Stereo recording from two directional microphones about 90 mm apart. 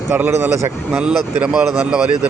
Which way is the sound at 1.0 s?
5° right (ahead or behind).